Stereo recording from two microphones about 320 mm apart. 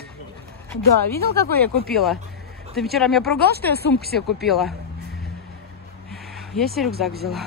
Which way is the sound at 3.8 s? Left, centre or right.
Left.